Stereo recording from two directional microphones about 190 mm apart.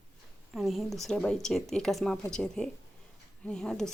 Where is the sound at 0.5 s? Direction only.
Centre (ahead or behind).